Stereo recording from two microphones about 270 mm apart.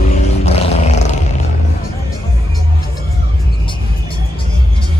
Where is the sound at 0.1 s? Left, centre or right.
Left.